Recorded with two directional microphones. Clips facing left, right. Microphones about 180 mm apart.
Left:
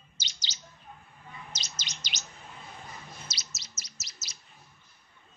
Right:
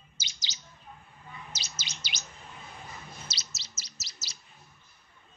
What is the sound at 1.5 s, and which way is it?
Chirp, 10° right (ahead or behind).